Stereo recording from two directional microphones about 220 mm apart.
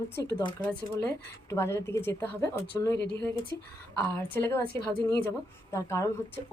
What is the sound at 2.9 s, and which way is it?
Speech, 50° left (ahead or behind).